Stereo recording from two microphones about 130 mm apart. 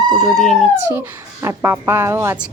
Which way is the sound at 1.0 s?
15° right (ahead or behind).